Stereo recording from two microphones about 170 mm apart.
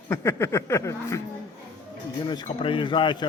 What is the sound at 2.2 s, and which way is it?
Speech, 25° left (ahead or behind).